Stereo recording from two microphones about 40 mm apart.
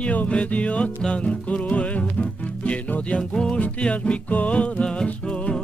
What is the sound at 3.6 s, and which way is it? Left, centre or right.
Music, left.